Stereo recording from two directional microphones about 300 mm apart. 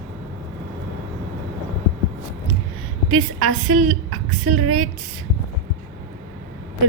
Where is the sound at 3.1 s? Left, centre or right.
Right.